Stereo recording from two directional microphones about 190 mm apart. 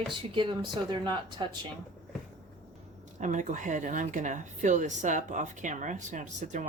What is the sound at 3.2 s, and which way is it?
A woman's voice, 40° right (ahead or behind).